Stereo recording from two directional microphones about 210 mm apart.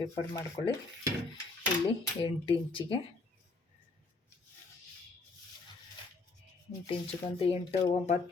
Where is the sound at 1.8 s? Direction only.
25° left (ahead or behind).